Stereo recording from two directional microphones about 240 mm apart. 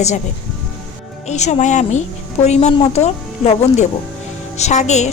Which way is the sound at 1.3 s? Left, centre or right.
Left.